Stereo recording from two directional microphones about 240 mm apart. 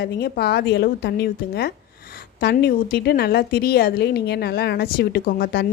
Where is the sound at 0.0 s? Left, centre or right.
Left.